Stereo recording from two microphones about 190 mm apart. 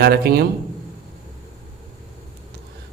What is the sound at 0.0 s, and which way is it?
Speech, 55° right (ahead or behind).